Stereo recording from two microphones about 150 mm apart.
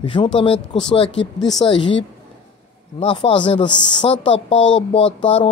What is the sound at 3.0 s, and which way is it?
Speech, 40° left (ahead or behind).